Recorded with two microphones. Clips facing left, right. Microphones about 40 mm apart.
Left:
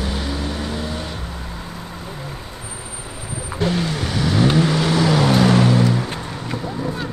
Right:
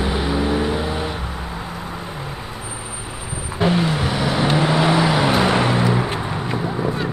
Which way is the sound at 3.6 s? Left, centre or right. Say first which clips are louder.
Right 3 dB; centre.